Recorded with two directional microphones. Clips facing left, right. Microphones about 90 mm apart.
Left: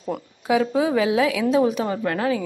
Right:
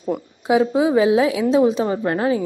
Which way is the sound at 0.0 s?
20° right (ahead or behind).